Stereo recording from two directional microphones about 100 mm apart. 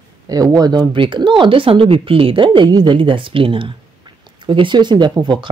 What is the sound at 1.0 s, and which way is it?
Speech, 55° right (ahead or behind).